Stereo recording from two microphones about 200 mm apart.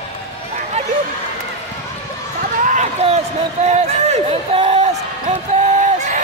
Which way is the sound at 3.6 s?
35° right (ahead or behind).